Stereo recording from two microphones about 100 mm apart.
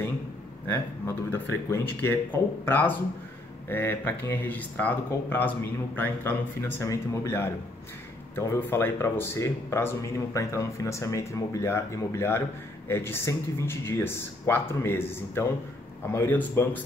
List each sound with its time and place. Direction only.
0.7 s speech: 25° left (ahead or behind)